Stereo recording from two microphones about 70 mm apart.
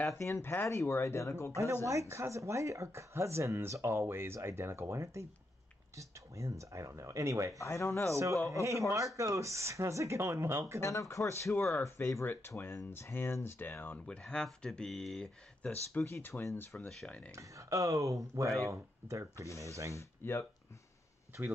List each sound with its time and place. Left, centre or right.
0.1 s speech: left
1.9 s speech: right
7.5 s speech: left
8.1 s speech: right
10.8 s speech: left
12.3 s speech: left
13.9 s speech: centre
16.2 s speech: left
17.4 s speech: right
19.3 s speech: left